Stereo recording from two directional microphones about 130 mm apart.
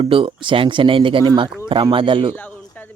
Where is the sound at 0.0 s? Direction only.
45° right (ahead or behind).